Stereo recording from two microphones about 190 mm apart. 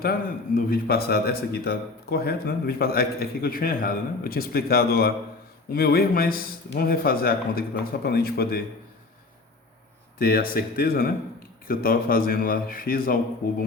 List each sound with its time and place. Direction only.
0.0 s a man's voice: 50° left (ahead or behind)
10.2 s a man's voice: 50° left (ahead or behind)